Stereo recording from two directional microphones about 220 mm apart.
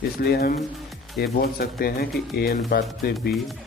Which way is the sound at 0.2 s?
45° left (ahead or behind).